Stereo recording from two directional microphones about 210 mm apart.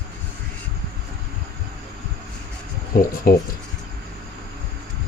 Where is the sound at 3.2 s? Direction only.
45° left (ahead or behind).